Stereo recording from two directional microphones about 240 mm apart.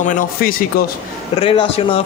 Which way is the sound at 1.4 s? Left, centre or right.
Left.